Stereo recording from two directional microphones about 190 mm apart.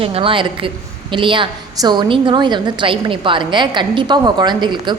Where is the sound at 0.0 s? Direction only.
30° right (ahead or behind).